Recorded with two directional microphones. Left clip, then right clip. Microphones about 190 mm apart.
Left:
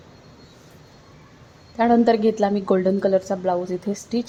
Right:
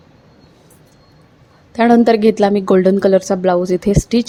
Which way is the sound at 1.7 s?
30° right (ahead or behind).